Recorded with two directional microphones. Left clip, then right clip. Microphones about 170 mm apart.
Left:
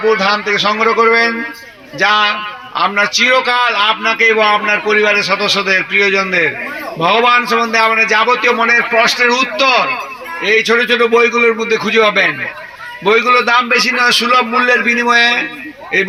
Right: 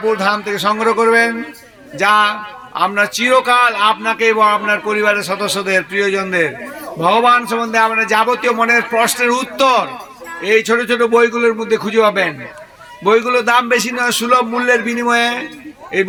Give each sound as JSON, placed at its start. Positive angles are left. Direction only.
{"t": 0.2, "sound": "speech", "side_deg": -15}